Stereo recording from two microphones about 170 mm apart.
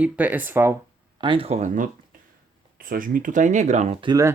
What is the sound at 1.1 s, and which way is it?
Speech, 30° right (ahead or behind).